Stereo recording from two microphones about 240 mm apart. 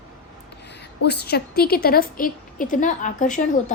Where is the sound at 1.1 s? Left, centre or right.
Left.